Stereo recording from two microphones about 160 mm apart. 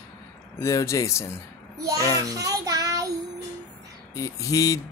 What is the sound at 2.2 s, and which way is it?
Child singing, 20° right (ahead or behind).